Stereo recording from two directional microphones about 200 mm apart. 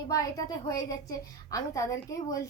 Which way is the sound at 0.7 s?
15° left (ahead or behind).